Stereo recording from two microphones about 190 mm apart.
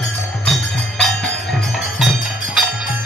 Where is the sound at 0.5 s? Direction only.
5° left (ahead or behind).